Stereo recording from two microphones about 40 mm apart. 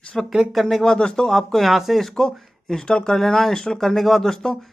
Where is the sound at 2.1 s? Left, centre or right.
Centre.